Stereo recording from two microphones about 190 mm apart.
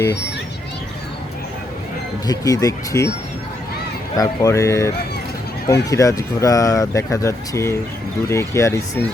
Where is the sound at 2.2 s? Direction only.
20° left (ahead or behind).